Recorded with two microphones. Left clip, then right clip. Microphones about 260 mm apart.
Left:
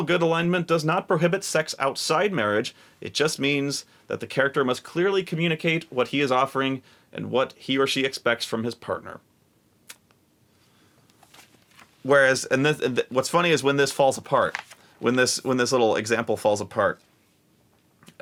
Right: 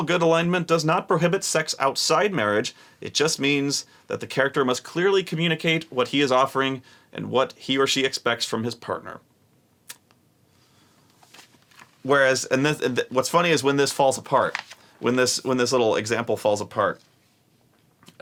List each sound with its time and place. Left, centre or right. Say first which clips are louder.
0.0 s speech: right 2 dB; left
9.9 s a sound: right 3 dB; left
12.0 s speech: left 1 dB; left